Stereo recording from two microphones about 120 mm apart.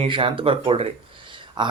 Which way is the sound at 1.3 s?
40° right (ahead or behind).